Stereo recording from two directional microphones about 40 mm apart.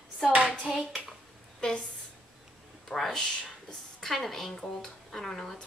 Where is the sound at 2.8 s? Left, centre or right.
Centre.